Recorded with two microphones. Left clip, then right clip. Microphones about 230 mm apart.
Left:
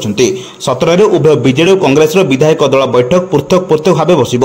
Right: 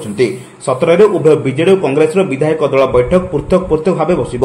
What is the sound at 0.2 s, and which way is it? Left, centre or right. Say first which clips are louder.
A man's voice: left 3 dB; left.